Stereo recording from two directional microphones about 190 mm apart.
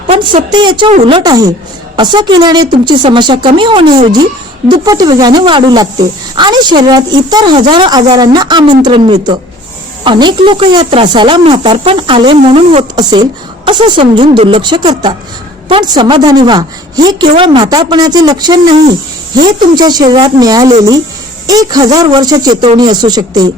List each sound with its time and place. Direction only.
0.1 s a woman's voice: 30° right (ahead or behind)